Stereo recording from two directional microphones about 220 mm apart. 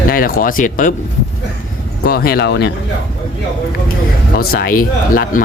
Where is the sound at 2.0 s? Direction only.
45° left (ahead or behind).